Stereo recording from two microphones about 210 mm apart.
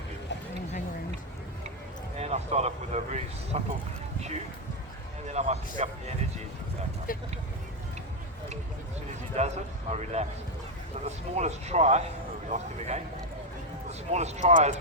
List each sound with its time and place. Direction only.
2.1 s speech: 30° right (ahead or behind)
5.3 s speech: 35° right (ahead or behind)
7.1 s speech: 40° left (ahead or behind)
9.4 s speech: 30° right (ahead or behind)
14.1 s speech: 30° right (ahead or behind)